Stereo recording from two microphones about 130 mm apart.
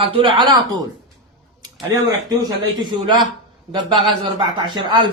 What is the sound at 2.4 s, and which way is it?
Speech, 35° right (ahead or behind).